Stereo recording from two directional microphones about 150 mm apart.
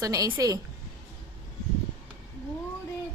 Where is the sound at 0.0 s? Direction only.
25° right (ahead or behind).